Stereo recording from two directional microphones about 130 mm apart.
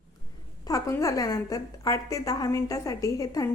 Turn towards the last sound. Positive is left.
turn(degrees=25)  # may be behind; listen again after turning